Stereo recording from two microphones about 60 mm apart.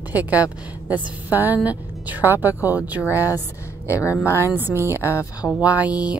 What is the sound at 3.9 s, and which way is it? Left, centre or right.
Speech, left.